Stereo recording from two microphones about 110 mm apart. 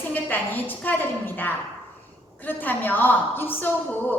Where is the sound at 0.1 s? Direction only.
15° left (ahead or behind).